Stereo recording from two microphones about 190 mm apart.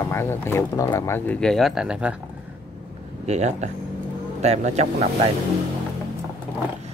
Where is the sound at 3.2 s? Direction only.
35° right (ahead or behind).